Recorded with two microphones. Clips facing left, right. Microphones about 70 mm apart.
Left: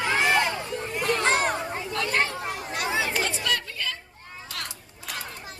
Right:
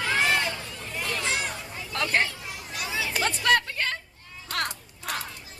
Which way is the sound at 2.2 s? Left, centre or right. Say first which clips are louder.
Left 2 dB; left.